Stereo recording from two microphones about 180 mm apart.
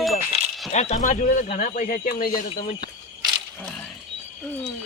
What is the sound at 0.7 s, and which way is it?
Speech, 40° left (ahead or behind).